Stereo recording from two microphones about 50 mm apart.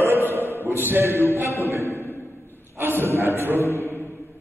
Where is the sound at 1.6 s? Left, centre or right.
Right.